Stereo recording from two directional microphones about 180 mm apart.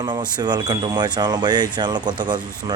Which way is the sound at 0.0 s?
25° right (ahead or behind).